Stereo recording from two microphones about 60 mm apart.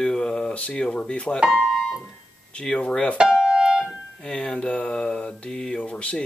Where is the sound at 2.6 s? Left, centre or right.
Centre.